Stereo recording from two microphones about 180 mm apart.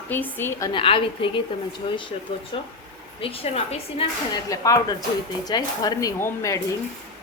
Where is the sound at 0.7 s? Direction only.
30° left (ahead or behind).